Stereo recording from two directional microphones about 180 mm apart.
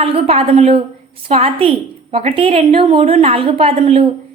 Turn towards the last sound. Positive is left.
turn(degrees=-35)  # may be behind; listen again after turning